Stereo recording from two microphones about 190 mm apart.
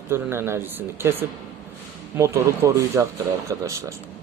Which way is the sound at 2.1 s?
15° right (ahead or behind).